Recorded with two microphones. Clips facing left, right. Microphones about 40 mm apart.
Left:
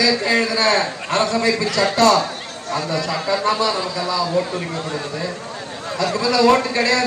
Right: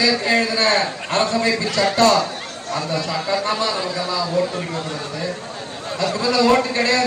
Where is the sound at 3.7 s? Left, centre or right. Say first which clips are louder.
Left 1 dB; right.